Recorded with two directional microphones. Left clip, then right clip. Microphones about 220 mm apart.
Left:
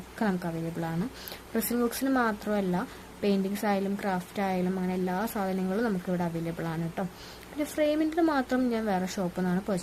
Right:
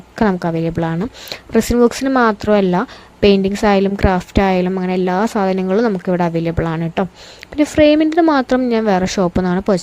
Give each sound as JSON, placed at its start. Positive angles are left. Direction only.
{"t": 0.2, "sound": "speech", "side_deg": -40}